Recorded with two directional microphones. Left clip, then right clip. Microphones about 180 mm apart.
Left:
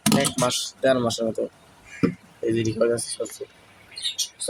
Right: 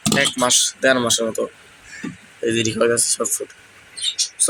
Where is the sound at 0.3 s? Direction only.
10° left (ahead or behind).